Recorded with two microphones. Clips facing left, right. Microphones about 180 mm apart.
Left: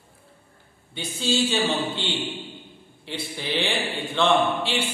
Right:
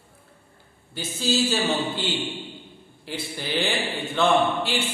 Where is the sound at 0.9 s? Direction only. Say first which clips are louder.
Even; centre (ahead or behind).